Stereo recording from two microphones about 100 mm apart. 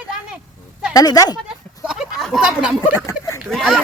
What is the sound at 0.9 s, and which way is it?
Speech, 35° left (ahead or behind).